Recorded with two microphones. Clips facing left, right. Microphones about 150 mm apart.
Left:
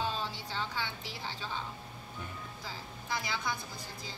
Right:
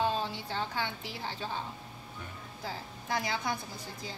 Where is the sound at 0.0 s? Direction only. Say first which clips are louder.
Right 5 dB; 55° right (ahead or behind).